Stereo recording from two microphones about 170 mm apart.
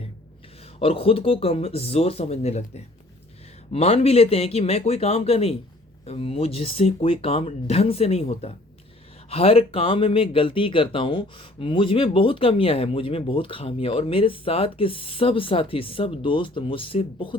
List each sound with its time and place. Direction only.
0.8 s speech: 35° left (ahead or behind)